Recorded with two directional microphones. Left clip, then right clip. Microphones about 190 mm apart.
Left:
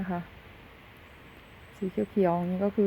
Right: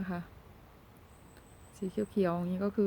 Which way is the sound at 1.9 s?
Centre (ahead or behind).